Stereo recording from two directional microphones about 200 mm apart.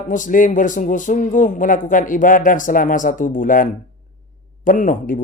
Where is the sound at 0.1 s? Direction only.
40° left (ahead or behind).